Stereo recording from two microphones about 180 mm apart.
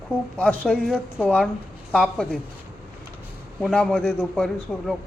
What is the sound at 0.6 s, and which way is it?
Speech, centre (ahead or behind).